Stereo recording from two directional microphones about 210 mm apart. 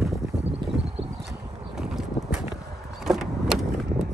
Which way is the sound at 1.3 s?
15° right (ahead or behind).